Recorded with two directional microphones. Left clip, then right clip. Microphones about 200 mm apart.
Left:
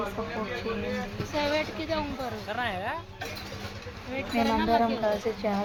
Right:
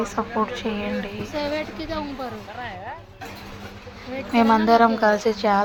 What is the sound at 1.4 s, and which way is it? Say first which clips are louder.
Speech: right 1 dB; 10° right (ahead or behind).